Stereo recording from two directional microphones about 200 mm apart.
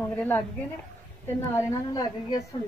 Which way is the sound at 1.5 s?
20° left (ahead or behind).